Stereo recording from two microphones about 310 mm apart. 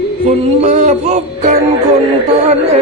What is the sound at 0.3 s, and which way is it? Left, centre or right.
Mantra, right.